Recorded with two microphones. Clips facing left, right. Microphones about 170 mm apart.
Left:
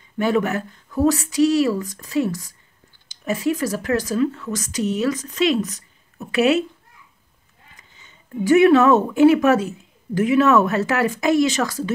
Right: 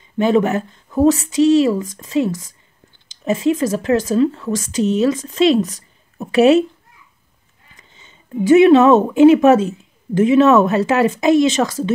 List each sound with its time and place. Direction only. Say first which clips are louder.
0.2 s speech: right 5 dB; 25° right (ahead or behind)
8.0 s speech: right 4 dB; 20° right (ahead or behind)